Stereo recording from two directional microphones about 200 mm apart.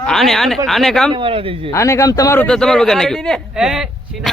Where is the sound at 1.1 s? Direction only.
25° right (ahead or behind).